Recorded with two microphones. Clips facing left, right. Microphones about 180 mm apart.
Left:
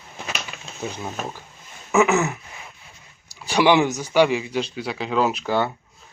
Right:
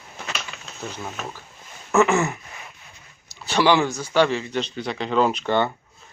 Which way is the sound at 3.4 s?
15° left (ahead or behind).